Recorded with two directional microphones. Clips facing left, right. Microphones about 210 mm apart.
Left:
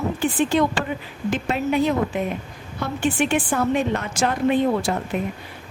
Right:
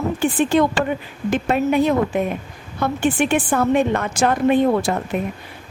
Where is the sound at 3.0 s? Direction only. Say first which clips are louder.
Right 2 dB; 55° right (ahead or behind).